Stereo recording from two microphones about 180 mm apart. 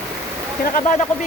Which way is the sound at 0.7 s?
45° left (ahead or behind).